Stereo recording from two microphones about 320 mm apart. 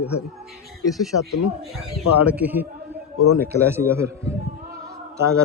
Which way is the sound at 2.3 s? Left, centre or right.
Centre.